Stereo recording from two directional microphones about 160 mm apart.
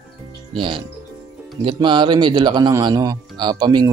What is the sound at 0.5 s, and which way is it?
A man's voice, 30° right (ahead or behind).